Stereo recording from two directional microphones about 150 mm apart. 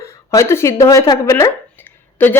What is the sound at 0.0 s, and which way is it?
A woman's voice, 20° left (ahead or behind).